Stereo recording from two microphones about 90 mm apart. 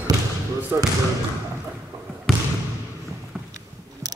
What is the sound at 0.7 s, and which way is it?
Speech, 25° right (ahead or behind).